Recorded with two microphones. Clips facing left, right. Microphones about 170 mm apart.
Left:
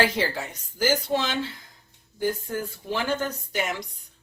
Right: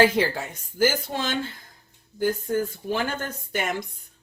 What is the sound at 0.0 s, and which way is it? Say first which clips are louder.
Speech: right 4 dB; 50° right (ahead or behind).